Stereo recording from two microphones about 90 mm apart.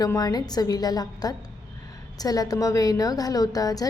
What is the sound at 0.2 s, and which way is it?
A woman's voice, 45° left (ahead or behind).